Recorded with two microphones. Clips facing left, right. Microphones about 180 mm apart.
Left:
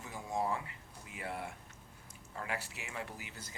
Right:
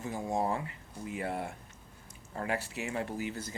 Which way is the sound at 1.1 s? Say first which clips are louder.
Right 6 dB; 40° right (ahead or behind).